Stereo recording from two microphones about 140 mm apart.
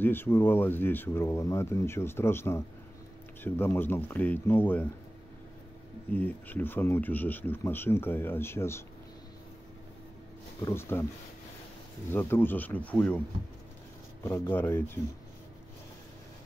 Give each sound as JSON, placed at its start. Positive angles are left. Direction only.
{"t": 0.0, "sound": "speech", "side_deg": 15}
{"t": 6.1, "sound": "speech", "side_deg": 10}
{"t": 10.6, "sound": "speech", "side_deg": 15}
{"t": 12.1, "sound": "speech", "side_deg": 15}
{"t": 14.2, "sound": "speech", "side_deg": 15}